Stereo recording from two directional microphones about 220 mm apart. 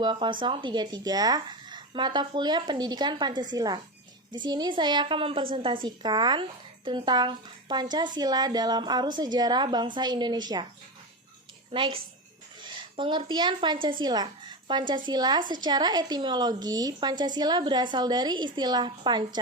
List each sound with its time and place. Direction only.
0.0 s a woman's voice: 20° right (ahead or behind)
11.7 s a woman's voice: 25° right (ahead or behind)